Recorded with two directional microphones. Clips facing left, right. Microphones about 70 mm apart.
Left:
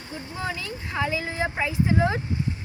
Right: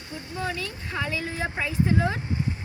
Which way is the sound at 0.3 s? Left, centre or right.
Centre.